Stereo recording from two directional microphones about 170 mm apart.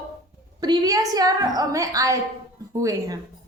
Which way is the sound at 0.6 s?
25° right (ahead or behind).